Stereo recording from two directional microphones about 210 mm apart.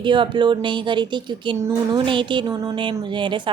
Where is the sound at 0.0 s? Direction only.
20° right (ahead or behind).